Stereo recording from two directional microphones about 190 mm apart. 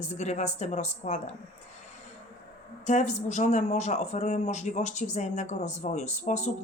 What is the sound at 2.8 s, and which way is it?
Speech, 40° left (ahead or behind).